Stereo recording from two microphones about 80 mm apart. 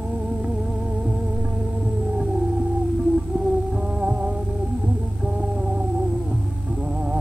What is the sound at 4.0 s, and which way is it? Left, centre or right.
Music, centre.